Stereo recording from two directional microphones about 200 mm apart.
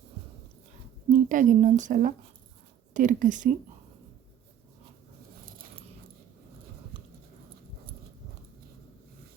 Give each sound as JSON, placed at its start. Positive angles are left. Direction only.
{"t": 1.1, "sound": "a woman's voice", "side_deg": -40}